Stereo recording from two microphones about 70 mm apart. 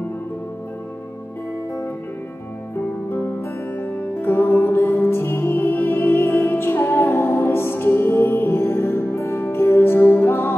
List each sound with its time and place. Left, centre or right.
3.1 s music: left